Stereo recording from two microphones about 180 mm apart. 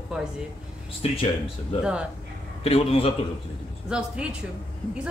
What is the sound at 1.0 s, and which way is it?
Speech, 35° left (ahead or behind).